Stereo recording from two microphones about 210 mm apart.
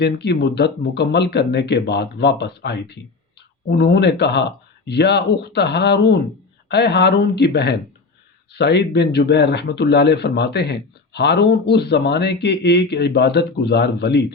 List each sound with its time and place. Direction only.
0.0 s speech: 55° left (ahead or behind)